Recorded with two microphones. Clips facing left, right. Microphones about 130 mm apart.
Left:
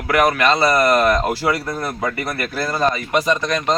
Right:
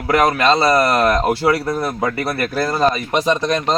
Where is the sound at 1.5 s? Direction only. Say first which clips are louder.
Right 4 dB; 10° right (ahead or behind).